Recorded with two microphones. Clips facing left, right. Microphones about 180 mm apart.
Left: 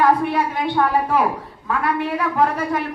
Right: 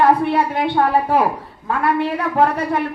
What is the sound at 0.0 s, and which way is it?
A woman's voice, 30° right (ahead or behind).